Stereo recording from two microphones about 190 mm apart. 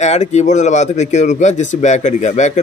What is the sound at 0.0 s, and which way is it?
Speech, 35° left (ahead or behind).